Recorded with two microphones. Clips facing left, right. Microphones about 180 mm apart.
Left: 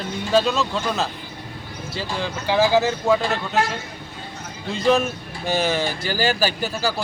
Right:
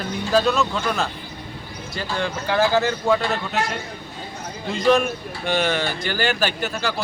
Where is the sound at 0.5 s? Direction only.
30° left (ahead or behind).